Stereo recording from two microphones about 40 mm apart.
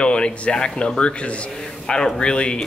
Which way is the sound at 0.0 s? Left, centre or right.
Left.